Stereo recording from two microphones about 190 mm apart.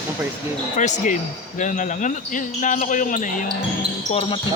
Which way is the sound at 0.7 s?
40° left (ahead or behind).